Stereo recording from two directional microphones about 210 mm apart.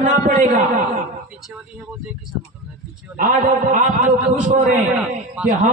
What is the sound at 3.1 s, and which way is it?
A man's voice, 40° right (ahead or behind).